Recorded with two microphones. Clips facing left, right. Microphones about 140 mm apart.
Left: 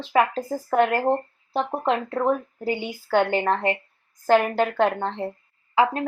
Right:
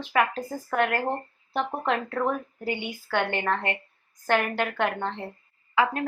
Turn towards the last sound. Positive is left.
turn(degrees=30)  # may be behind; listen again after turning